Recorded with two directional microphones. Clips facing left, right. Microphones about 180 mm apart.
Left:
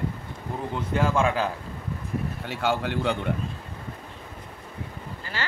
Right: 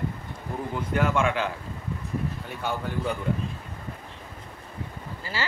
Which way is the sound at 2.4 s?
90° left.